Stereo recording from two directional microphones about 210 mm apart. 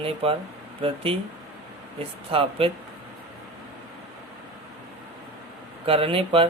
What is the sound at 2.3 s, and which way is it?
Speech, 25° right (ahead or behind).